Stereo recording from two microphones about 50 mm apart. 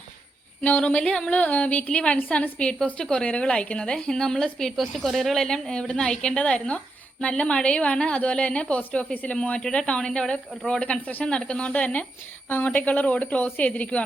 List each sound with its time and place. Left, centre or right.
0.6 s a woman's voice: left
1.3 s a woman's voice: left
11.0 s a woman's voice: left
11.3 s a woman's voice: centre
12.5 s a woman's voice: left